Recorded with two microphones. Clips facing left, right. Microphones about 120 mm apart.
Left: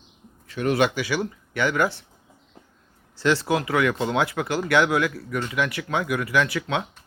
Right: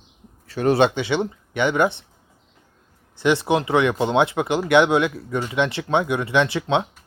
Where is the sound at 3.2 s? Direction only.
20° right (ahead or behind).